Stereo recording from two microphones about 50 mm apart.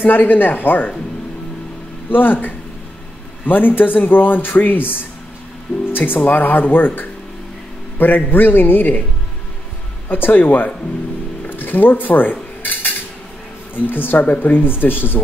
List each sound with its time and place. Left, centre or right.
0.0 s a man's voice: left
2.0 s a man's voice: left
10.0 s a man's voice: left
11.4 s cutlery: left
13.7 s a man's voice: left